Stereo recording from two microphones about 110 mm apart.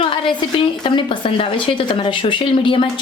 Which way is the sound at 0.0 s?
50° left (ahead or behind).